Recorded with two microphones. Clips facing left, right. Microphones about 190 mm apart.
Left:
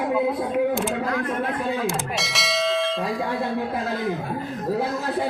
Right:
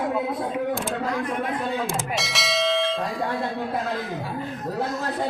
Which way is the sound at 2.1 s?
Centre (ahead or behind).